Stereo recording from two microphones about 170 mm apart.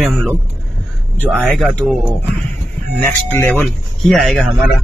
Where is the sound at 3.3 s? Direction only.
10° left (ahead or behind).